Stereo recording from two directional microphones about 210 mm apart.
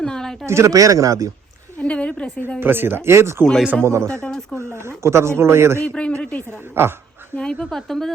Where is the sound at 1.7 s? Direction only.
5° left (ahead or behind).